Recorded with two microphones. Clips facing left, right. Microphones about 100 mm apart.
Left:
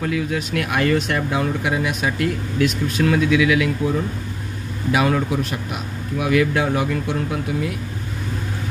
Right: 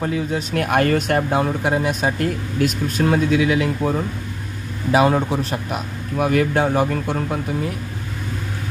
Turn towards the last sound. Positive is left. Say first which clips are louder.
# even
turn(degrees=-40)  # may be behind; listen again after turning